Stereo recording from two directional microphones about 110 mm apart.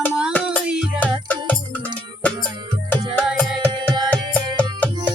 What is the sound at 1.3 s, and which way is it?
Music, 15° left (ahead or behind).